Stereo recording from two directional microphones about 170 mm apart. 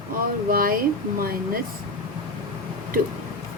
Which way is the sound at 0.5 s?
55° right (ahead or behind).